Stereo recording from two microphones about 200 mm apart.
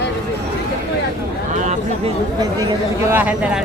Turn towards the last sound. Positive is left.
turn(degrees=-5)  # may be behind; listen again after turning